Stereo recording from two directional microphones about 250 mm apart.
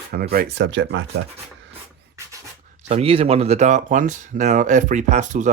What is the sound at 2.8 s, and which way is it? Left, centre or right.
Speech, right.